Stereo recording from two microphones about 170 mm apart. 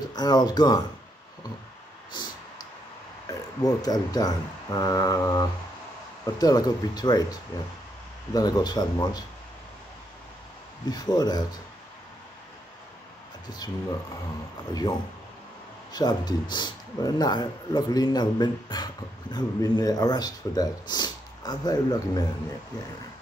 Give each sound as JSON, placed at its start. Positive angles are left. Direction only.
{"t": 0.1, "sound": "speech", "side_deg": 25}
{"t": 3.3, "sound": "speech", "side_deg": 20}
{"t": 10.9, "sound": "speech", "side_deg": 25}
{"t": 13.5, "sound": "speech", "side_deg": 20}